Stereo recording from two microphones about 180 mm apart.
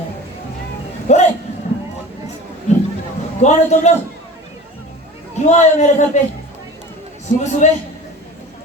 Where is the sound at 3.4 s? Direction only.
40° left (ahead or behind).